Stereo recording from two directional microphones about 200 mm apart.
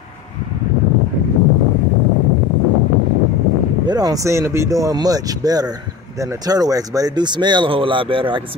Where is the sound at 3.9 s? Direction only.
20° right (ahead or behind).